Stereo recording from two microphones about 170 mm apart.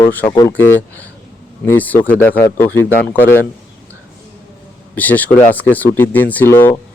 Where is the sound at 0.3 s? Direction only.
25° left (ahead or behind).